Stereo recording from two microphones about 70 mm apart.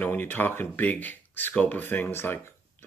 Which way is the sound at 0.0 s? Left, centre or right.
Left.